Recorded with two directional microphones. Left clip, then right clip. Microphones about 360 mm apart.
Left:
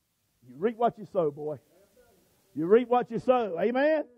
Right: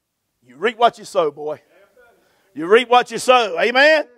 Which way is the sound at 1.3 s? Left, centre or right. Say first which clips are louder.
Right 9 dB; centre.